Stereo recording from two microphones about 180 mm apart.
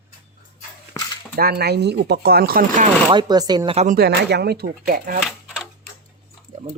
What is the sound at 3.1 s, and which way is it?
Speech, 25° right (ahead or behind).